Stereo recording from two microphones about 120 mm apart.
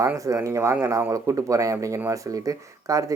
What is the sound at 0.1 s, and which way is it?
Speech, 20° right (ahead or behind).